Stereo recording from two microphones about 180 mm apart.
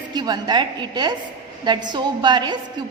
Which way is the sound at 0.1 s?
25° right (ahead or behind).